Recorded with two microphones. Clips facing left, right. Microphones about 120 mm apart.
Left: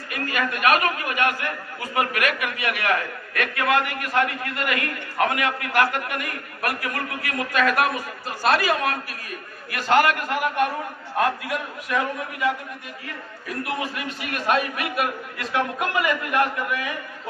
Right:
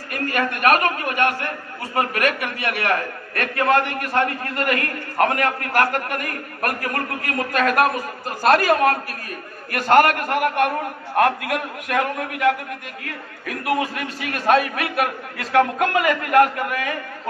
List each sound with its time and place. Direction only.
0.1 s a man's voice: 45° right (ahead or behind); by 13.7 s 65° right (ahead or behind)
15.5 s a man's voice: 50° right (ahead or behind)